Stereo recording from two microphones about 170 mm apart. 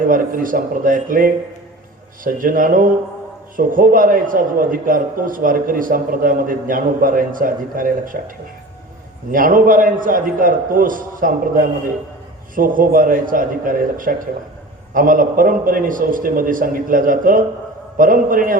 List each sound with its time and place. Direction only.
0.1 s speech: 55° right (ahead or behind)
9.3 s speech: 55° right (ahead or behind)